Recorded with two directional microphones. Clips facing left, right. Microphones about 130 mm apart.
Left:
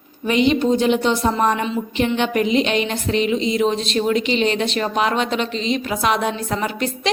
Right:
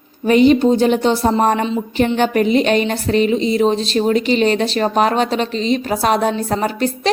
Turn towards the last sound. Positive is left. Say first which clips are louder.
# right 4 dB
turn(degrees=-40)  # may be behind; listen again after turning